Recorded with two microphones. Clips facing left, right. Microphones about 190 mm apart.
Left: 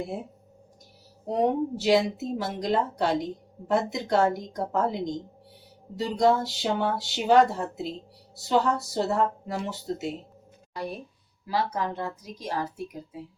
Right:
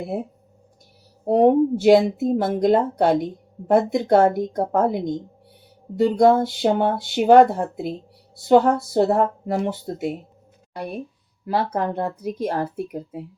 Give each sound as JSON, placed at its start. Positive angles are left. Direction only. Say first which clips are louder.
{"t": 1.2, "sound": "a woman's voice", "louder": "right 9 dB", "side_deg": -55}
{"t": 11.4, "sound": "speech", "louder": "right 5 dB", "side_deg": -55}